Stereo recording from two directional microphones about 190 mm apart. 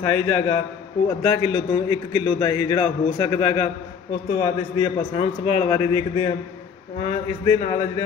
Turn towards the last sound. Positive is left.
turn(degrees=25)  # may be behind; listen again after turning